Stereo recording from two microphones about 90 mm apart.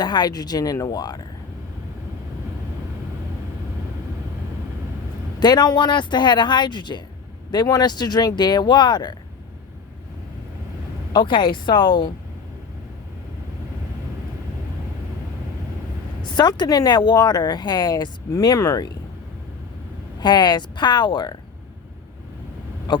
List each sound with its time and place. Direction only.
0.0 s speech: 50° left (ahead or behind)
5.4 s speech: 50° left (ahead or behind)
11.1 s speech: 55° left (ahead or behind)
16.2 s speech: 55° left (ahead or behind)
20.1 s speech: 55° left (ahead or behind)
22.9 s a sound: 55° left (ahead or behind)